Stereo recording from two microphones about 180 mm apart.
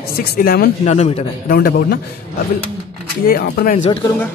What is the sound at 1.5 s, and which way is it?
Speech, 55° left (ahead or behind).